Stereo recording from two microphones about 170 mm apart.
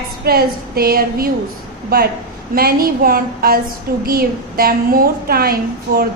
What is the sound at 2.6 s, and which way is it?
A woman's voice, 60° right (ahead or behind).